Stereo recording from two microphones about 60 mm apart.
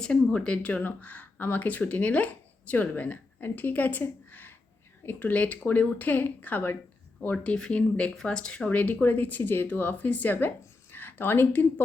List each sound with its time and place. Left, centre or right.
0.3 s speech: centre
7.4 s speech: centre
10.9 s a sound: left